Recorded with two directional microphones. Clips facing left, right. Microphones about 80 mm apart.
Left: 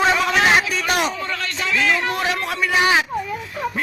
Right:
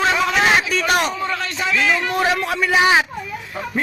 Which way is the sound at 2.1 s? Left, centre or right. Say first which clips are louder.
Right 4 dB; right.